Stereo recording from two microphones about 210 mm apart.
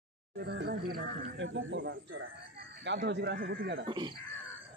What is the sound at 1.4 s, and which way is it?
Speech, 65° right (ahead or behind).